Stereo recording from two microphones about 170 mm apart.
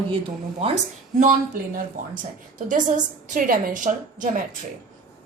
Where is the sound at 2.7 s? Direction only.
50° right (ahead or behind).